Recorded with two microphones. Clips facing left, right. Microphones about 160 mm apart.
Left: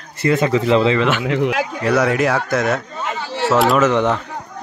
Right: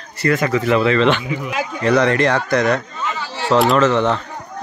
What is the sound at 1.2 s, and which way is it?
Speech, 80° left.